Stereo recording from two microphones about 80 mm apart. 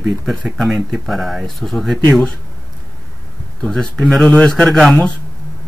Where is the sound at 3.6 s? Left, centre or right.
Centre.